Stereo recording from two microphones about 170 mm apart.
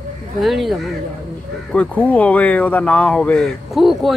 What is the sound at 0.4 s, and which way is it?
Speech, centre (ahead or behind).